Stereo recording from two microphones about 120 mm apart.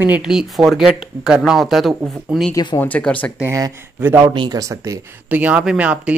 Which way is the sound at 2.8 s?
10° left (ahead or behind).